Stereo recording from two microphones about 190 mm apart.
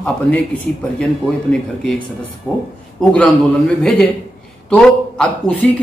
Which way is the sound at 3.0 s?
5° left (ahead or behind).